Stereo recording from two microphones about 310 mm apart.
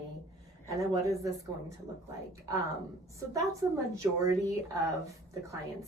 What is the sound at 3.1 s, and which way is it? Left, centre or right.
Speech, centre.